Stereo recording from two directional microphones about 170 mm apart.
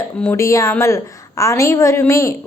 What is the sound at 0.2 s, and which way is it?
A woman's voice, 15° left (ahead or behind).